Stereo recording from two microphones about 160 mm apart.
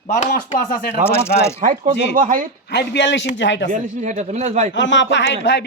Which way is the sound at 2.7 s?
90° left.